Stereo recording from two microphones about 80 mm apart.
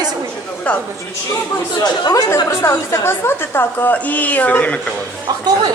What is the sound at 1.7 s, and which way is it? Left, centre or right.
Speech, left.